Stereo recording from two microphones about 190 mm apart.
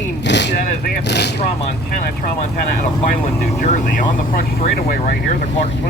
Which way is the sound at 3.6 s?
45° left (ahead or behind).